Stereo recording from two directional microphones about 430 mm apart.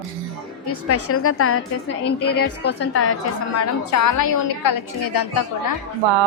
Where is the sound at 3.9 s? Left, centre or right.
Left.